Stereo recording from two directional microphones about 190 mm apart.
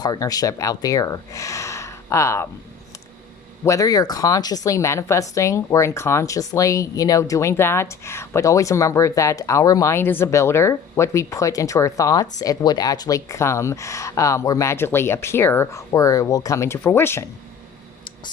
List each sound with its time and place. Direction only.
0.0 s speech: 20° left (ahead or behind)
3.6 s speech: 15° left (ahead or behind)